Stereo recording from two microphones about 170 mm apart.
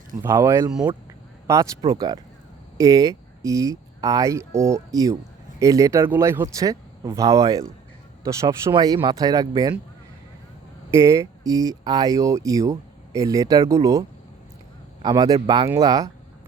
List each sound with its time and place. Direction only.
0.2 s speech: 15° right (ahead or behind)
0.7 s speech: 5° right (ahead or behind)
1.5 s speech: 20° right (ahead or behind)
10.9 s speech: 15° right (ahead or behind)
15.0 s speech: 25° right (ahead or behind)